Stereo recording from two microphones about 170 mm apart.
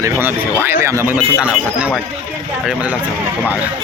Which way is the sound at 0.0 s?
15° right (ahead or behind).